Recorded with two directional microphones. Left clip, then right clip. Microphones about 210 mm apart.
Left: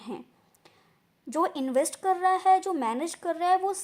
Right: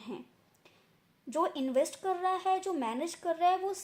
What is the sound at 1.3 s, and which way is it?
A woman's voice, 35° left (ahead or behind).